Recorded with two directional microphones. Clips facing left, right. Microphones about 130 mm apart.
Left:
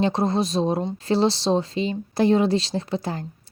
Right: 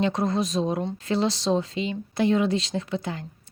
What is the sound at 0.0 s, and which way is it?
A woman's voice, 30° left (ahead or behind).